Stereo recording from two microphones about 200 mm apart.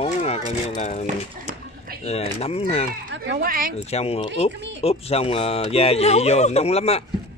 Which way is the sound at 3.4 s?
45° right (ahead or behind).